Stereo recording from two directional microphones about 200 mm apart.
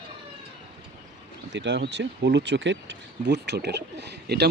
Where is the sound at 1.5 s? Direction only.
60° right (ahead or behind).